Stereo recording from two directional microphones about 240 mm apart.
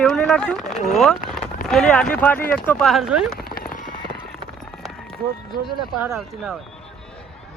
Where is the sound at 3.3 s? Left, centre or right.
Left.